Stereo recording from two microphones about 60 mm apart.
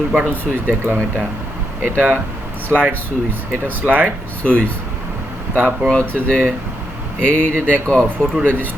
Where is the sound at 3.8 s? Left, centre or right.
Right.